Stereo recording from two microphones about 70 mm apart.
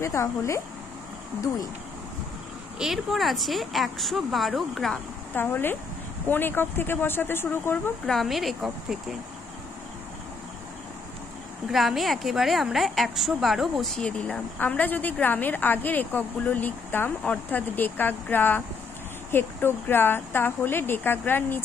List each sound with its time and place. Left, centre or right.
0.0 s speech: left
2.8 s a woman's voice: centre
5.3 s a woman's voice: left
8.1 s a woman's voice: centre
11.7 s a woman's voice: centre
14.0 s a woman's voice: centre